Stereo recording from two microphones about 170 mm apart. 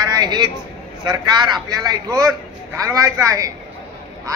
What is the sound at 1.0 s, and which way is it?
Speech, 25° right (ahead or behind).